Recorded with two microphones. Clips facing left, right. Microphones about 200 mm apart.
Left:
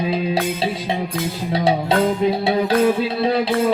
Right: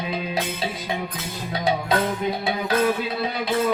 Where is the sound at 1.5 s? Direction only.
30° left (ahead or behind).